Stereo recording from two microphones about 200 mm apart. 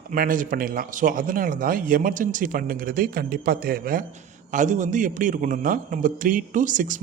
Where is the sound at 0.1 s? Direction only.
40° right (ahead or behind).